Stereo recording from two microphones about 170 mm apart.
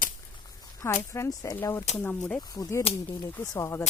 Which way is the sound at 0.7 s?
15° left (ahead or behind).